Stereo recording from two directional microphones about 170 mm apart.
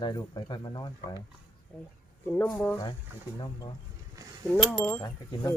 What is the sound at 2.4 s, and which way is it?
Wind chime, 5° left (ahead or behind).